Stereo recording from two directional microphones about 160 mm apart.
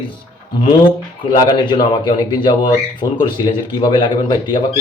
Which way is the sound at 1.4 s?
30° left (ahead or behind).